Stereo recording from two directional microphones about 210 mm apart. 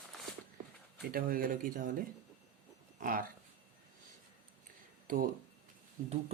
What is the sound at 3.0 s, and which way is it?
Speech, 40° right (ahead or behind).